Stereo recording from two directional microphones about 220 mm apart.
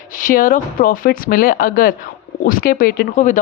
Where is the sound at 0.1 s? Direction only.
40° left (ahead or behind).